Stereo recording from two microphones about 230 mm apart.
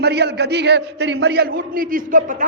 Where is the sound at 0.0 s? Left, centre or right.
Right.